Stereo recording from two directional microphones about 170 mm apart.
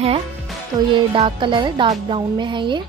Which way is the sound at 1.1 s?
30° right (ahead or behind).